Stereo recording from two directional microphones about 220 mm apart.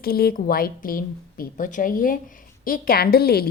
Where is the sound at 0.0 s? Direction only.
45° left (ahead or behind).